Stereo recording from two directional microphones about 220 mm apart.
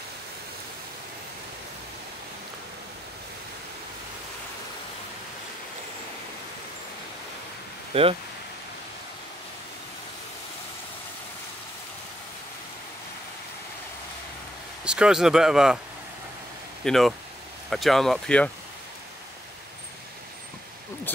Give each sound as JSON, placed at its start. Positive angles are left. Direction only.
{"t": 7.9, "sound": "speech", "side_deg": -25}
{"t": 14.9, "sound": "speech", "side_deg": -5}
{"t": 16.8, "sound": "speech", "side_deg": 0}